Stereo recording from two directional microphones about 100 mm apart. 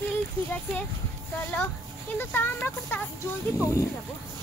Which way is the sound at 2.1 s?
20° left (ahead or behind).